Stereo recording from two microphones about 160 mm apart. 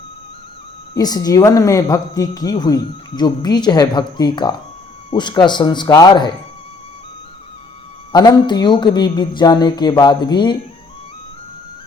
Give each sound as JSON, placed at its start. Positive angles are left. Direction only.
{"t": 0.9, "sound": "a woman's voice", "side_deg": 25}
{"t": 8.1, "sound": "a woman's voice", "side_deg": 25}